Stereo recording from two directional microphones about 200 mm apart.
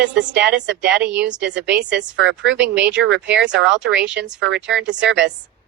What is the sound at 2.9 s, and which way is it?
Speech, 65° right (ahead or behind).